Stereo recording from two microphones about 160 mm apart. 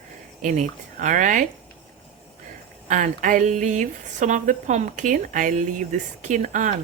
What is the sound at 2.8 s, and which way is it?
Speech, 55° right (ahead or behind).